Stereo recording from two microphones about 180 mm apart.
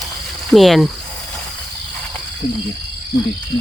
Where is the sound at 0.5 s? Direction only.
Centre (ahead or behind).